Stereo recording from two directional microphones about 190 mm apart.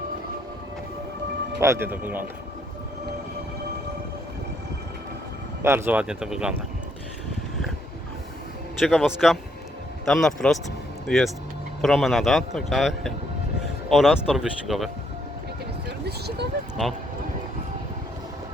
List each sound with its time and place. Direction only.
1.5 s speech: 15° right (ahead or behind)
5.6 s speech: 10° right (ahead or behind)
8.8 s a man's voice: centre (ahead or behind)
16.0 s a sound: 60° right (ahead or behind)